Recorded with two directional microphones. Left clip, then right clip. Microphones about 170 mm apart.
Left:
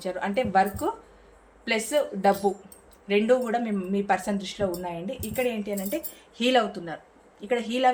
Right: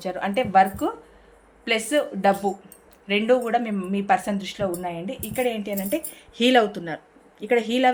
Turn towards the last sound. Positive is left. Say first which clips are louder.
# right 4 dB
turn(degrees=-50)  # may be behind; listen again after turning